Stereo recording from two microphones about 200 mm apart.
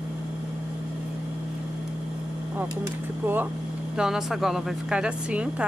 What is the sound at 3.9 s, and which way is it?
Speech, centre (ahead or behind).